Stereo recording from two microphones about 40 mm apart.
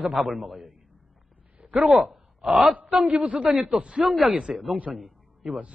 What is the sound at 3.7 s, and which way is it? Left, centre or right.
Speech, right.